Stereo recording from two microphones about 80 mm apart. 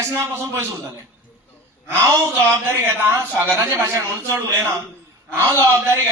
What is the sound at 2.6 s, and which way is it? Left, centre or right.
Speech, right.